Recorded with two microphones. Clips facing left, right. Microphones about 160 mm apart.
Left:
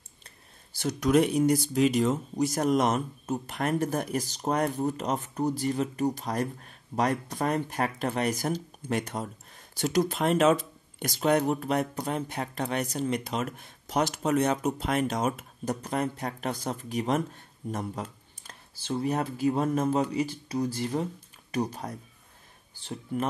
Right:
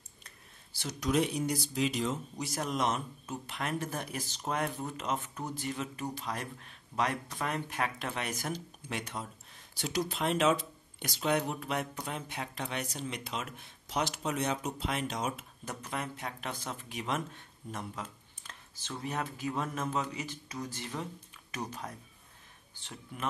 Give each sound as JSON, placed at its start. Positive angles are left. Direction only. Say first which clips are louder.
{"t": 0.7, "sound": "speech", "louder": "left 7 dB", "side_deg": 50}